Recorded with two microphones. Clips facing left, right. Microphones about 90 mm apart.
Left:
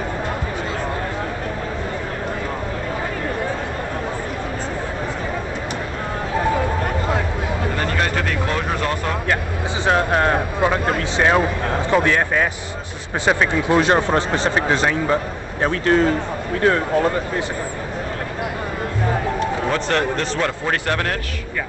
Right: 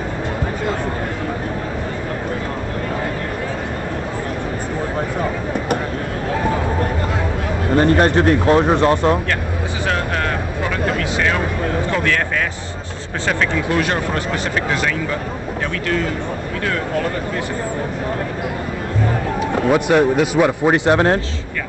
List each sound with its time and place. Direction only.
7.7 s a sound: 35° right (ahead or behind)
8.1 s speech: 30° right (ahead or behind)
9.8 s a man's voice: 30° left (ahead or behind)
19.4 s a man's voice: 10° right (ahead or behind)